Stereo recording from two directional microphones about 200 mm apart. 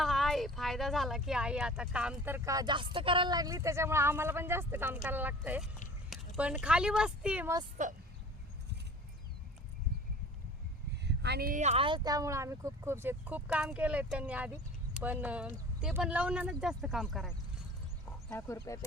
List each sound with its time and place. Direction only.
0.0 s speech: centre (ahead or behind)
7.8 s speech: 40° right (ahead or behind)
11.0 s speech: 55° right (ahead or behind); by 17.3 s centre (ahead or behind)
18.3 s speech: 15° left (ahead or behind)